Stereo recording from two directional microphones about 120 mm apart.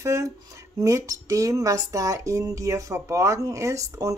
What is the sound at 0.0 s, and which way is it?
Speech, 25° right (ahead or behind).